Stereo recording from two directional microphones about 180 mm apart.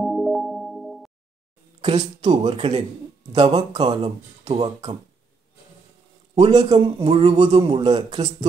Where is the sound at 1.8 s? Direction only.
35° right (ahead or behind).